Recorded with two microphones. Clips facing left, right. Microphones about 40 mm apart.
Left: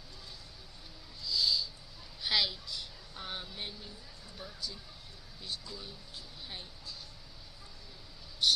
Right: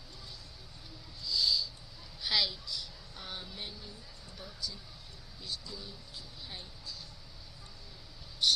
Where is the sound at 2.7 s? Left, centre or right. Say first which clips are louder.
Even; centre.